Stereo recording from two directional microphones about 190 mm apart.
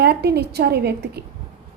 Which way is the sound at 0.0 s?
60° right (ahead or behind).